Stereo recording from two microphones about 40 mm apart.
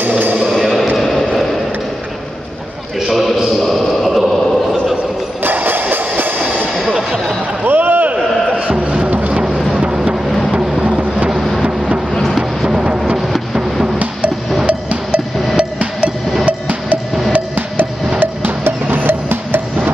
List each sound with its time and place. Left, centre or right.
0.5 s music: centre
3.0 s a sound: centre
3.6 s a sound: centre
5.4 s music: right
6.9 s music: right
7.6 s a sound: right
8.5 s music: right
10.8 s vehicle: right
12.1 s vehicle: centre
12.6 s a sound: centre
14.7 s cowbell: right
15.5 s percussion: right
16.4 s music: right
17.3 s music: right